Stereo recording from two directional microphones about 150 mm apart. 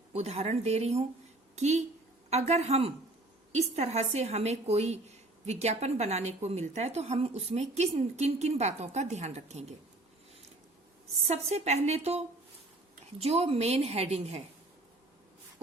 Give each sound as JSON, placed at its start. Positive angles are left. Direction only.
{"t": 0.1, "sound": "a woman's voice", "side_deg": -45}
{"t": 11.3, "sound": "a woman's voice", "side_deg": -45}
{"t": 13.2, "sound": "a woman's voice", "side_deg": -45}